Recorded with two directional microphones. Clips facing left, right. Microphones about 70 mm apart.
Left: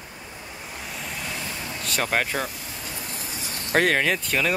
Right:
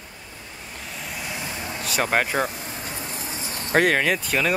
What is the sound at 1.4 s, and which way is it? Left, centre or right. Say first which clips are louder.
Vehicle: right 2 dB; centre.